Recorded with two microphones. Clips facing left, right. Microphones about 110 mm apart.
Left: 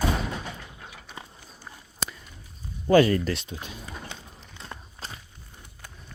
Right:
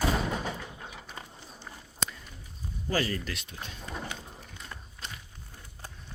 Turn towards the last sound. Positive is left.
turn(degrees=30)  # may be behind; listen again after turning